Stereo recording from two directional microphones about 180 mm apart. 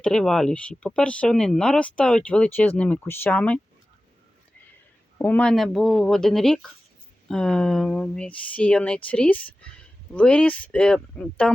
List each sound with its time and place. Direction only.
0.0 s speech: 5° left (ahead or behind)
5.1 s speech: 10° left (ahead or behind)